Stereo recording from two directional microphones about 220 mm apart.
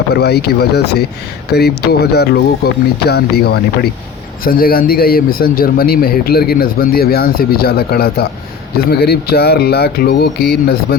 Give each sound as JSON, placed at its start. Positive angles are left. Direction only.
{"t": 0.1, "sound": "speech", "side_deg": 50}